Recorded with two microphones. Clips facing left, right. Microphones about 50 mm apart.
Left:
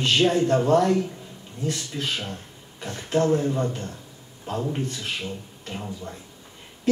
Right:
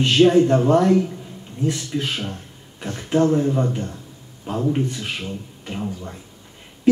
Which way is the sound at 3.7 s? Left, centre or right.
Right.